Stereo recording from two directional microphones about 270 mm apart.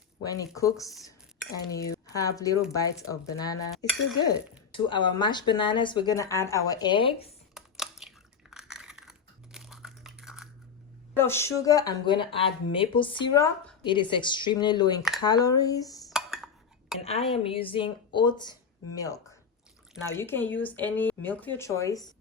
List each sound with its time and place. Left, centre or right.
0.2 s speech: centre
7.5 s computer keyboard: centre
11.1 s speech: centre
16.0 s dishes: centre
17.0 s speech: left